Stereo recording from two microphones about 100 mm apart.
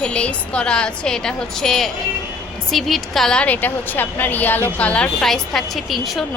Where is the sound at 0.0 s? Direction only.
10° left (ahead or behind).